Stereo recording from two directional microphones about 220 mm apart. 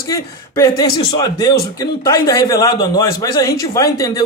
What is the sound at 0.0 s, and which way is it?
Speech, 15° left (ahead or behind).